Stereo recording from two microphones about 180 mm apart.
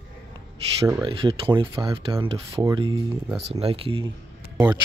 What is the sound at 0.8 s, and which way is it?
Speech, 25° right (ahead or behind).